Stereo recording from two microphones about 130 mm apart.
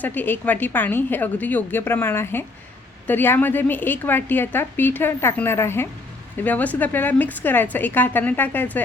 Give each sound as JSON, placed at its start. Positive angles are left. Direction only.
{"t": 0.0, "sound": "a woman's voice", "side_deg": 15}